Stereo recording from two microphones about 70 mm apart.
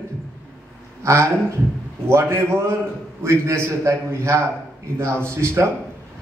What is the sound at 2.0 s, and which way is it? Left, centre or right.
A man's voice, right.